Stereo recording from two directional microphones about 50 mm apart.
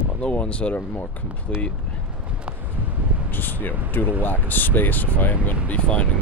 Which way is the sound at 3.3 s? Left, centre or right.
Left.